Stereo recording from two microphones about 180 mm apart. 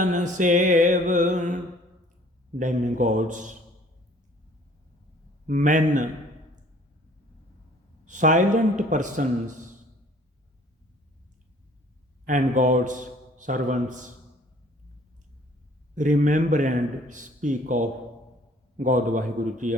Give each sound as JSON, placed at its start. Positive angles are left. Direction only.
{"t": 0.0, "sound": "music", "side_deg": -45}
{"t": 2.6, "sound": "a man's voice", "side_deg": -45}
{"t": 5.5, "sound": "a man's voice", "side_deg": -45}
{"t": 8.0, "sound": "a man's voice", "side_deg": -45}
{"t": 12.2, "sound": "a man's voice", "side_deg": -45}
{"t": 16.0, "sound": "a man's voice", "side_deg": -45}